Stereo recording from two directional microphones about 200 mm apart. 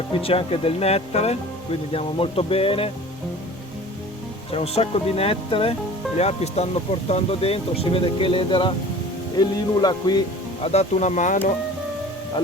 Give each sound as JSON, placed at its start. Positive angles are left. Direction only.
{"t": 0.1, "sound": "speech", "side_deg": 30}
{"t": 4.5, "sound": "speech", "side_deg": 30}
{"t": 10.7, "sound": "speech", "side_deg": 35}